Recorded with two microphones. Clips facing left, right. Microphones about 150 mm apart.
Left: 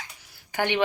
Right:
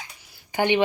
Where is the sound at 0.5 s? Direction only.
15° right (ahead or behind).